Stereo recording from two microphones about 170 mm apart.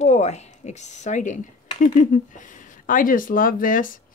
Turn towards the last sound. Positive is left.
turn(degrees=55)  # may be behind; listen again after turning